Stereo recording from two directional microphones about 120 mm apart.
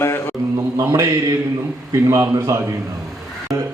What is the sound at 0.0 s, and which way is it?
Mantra, 20° left (ahead or behind).